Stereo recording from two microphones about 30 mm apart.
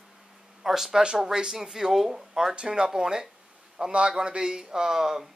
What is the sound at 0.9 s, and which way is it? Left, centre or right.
Speech, right.